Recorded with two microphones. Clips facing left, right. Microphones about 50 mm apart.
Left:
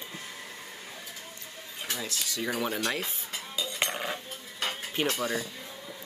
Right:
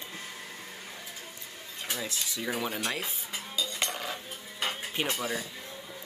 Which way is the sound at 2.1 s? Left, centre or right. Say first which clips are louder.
Left 1 dB; right.